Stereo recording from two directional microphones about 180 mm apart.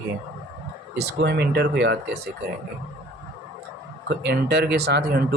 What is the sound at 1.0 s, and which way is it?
Speech, 65° right (ahead or behind).